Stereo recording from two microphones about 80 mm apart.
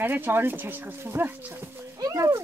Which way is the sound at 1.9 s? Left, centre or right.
Right.